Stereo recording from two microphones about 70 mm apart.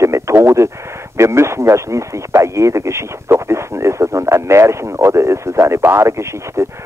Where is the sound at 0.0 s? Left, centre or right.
Right.